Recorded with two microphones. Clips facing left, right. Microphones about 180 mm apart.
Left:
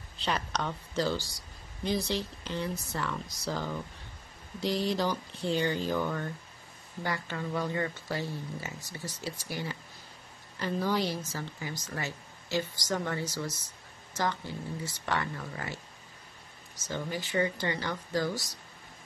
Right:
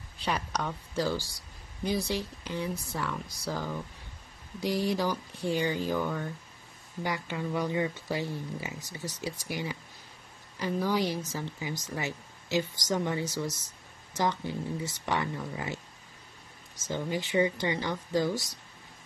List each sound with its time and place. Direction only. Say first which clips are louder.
0.2 s a woman's voice: even; 10° right (ahead or behind)
16.8 s speech: right 3 dB; 20° right (ahead or behind)